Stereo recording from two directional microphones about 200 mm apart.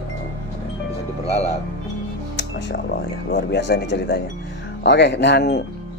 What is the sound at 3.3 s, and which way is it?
Speech, 55° left (ahead or behind).